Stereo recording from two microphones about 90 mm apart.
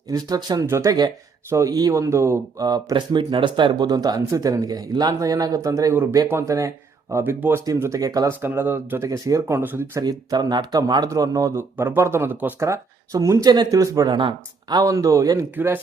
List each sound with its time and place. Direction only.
0.1 s a man's voice: 45° right (ahead or behind); by 2.4 s 30° right (ahead or behind)
2.6 s speech: 45° right (ahead or behind)
2.9 s a man's voice: 60° right (ahead or behind); by 8.3 s 40° right (ahead or behind)
8.3 s speech: 25° right (ahead or behind)
9.0 s a man's voice: 40° right (ahead or behind)
9.6 s speech: 25° right (ahead or behind)
10.0 s a man's voice: 50° right (ahead or behind); by 12.6 s 20° right (ahead or behind)
12.6 s a man's voice: 40° right (ahead or behind)
14.1 s speech: 60° right (ahead or behind); by 15.4 s 40° right (ahead or behind)
15.5 s speech: 25° right (ahead or behind)